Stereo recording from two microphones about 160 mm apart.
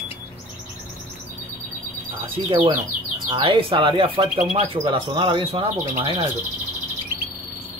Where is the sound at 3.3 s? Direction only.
35° right (ahead or behind).